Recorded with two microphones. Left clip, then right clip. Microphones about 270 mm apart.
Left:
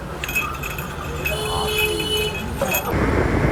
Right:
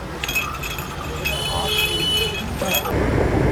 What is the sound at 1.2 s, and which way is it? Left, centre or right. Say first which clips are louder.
Vehicle: even; centre.